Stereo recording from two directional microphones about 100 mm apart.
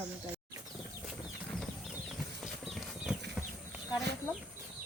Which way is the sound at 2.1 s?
Centre (ahead or behind).